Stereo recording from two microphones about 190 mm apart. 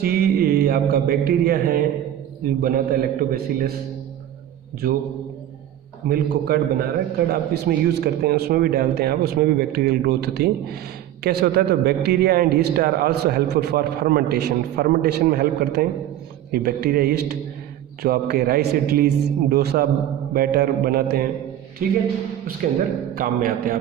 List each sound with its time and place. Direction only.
0.0 s a man's voice: 55° right (ahead or behind)
6.1 s a man's voice: 55° right (ahead or behind)
23.1 s a man's voice: 50° right (ahead or behind)